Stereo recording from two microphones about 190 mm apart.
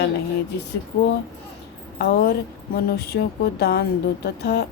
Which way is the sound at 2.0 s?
55° left (ahead or behind).